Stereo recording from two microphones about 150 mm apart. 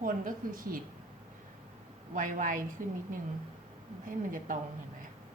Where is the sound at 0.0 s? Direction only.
65° right (ahead or behind).